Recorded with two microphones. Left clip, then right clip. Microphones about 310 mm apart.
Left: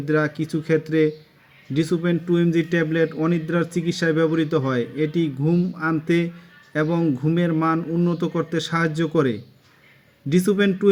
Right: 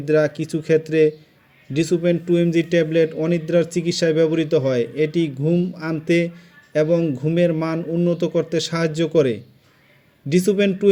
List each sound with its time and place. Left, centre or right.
0.0 s a man's voice: centre